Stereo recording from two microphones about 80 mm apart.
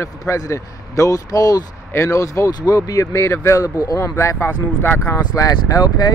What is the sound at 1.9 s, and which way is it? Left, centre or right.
Speech, left.